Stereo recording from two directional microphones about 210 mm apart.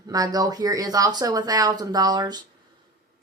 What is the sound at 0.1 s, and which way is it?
A woman's voice, 20° right (ahead or behind).